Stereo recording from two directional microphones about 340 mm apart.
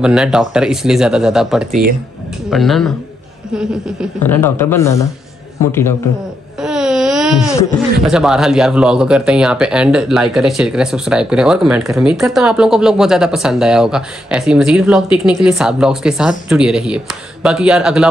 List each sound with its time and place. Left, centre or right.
0.0 s speech: centre
1.7 s speech: right
2.5 s speech: centre
6.6 s a sound: centre
8.0 s speech: centre